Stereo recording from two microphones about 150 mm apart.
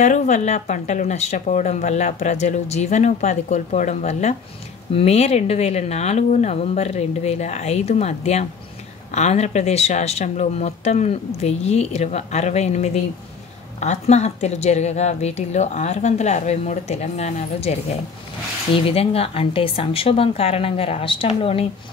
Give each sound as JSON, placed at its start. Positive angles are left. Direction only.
{"t": 0.0, "sound": "speech", "side_deg": 55}